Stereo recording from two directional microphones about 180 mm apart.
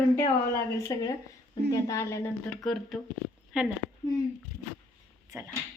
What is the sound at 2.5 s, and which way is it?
Speech, centre (ahead or behind).